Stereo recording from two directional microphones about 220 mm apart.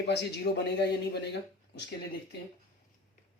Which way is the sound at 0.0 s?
50° left (ahead or behind).